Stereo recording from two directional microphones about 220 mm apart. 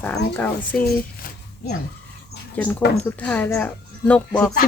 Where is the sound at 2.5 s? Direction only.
5° left (ahead or behind).